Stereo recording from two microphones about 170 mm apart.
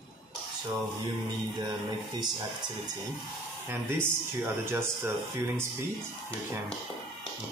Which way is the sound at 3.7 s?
15° right (ahead or behind).